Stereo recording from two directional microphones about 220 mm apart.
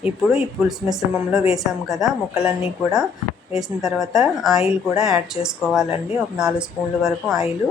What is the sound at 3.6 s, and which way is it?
Speech, centre (ahead or behind).